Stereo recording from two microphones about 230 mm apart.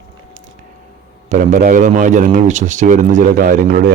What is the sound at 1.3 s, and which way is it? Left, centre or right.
A man's voice, right.